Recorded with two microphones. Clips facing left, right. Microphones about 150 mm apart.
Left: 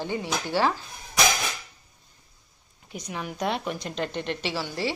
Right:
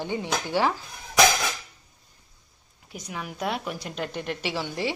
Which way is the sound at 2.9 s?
Centre (ahead or behind).